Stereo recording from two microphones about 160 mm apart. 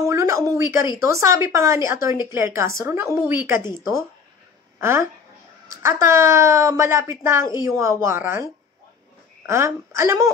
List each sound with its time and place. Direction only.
0.1 s a sound: 20° right (ahead or behind)
1.1 s speech: 15° right (ahead or behind)
9.5 s speech: 15° right (ahead or behind)